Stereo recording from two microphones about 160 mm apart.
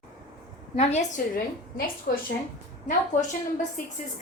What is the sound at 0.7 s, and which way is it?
Speech, 45° left (ahead or behind).